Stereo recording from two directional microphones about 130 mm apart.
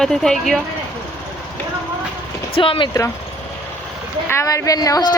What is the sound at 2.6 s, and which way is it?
Speech, 40° left (ahead or behind).